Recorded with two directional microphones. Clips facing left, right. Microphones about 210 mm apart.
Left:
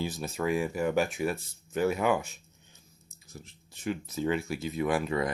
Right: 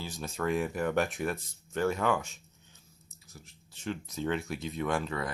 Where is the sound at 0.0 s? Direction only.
10° left (ahead or behind).